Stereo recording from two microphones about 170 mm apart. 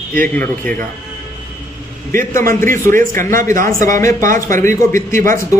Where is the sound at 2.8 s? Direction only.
55° right (ahead or behind).